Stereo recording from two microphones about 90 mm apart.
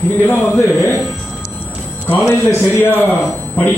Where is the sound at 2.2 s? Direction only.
25° left (ahead or behind).